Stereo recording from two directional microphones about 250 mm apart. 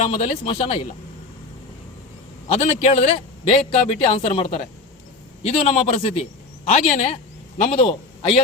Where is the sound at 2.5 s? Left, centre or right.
Left.